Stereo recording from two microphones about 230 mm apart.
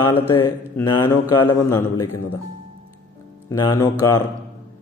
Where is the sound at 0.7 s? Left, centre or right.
Centre.